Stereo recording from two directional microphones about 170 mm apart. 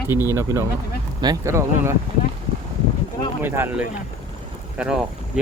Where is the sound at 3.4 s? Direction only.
15° right (ahead or behind).